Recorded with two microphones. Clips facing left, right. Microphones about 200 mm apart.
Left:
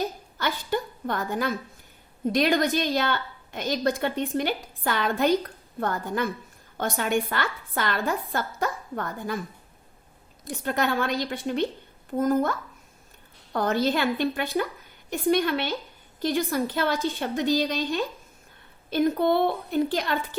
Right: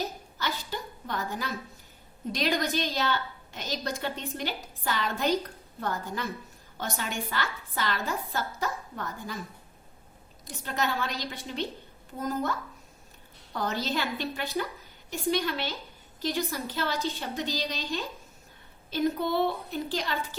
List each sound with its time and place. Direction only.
0.3 s a sound: 55° left (ahead or behind)
2.3 s a woman's voice: 55° left (ahead or behind)
10.4 s a woman's voice: 55° left (ahead or behind)